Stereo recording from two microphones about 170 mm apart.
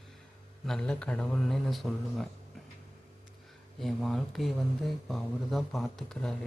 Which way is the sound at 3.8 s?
Centre (ahead or behind).